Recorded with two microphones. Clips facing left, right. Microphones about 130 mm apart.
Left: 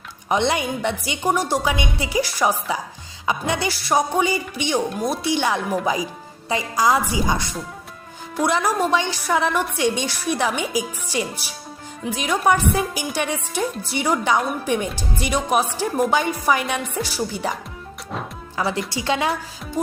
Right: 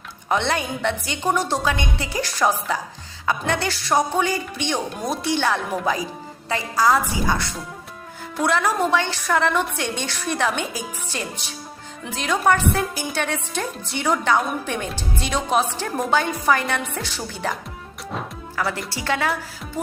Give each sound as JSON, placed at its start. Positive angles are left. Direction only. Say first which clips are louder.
{"t": 0.3, "sound": "a woman's voice", "louder": "left 2 dB", "side_deg": 15}